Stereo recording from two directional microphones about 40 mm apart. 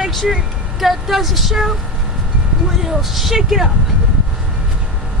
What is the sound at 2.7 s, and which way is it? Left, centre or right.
Speech, centre.